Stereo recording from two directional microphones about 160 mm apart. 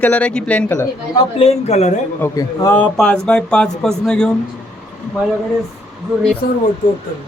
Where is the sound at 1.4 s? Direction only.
40° left (ahead or behind).